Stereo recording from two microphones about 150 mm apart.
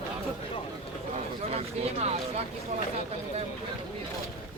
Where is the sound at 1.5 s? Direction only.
45° right (ahead or behind).